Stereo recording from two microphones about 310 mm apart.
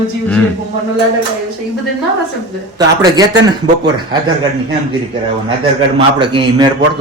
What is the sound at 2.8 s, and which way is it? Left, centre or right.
Mantra, centre.